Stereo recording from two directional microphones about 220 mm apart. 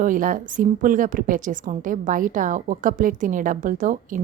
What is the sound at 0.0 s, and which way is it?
A woman's voice, 40° right (ahead or behind).